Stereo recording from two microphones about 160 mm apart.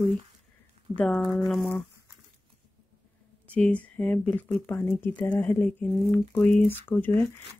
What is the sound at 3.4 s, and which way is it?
Speech, 10° left (ahead or behind).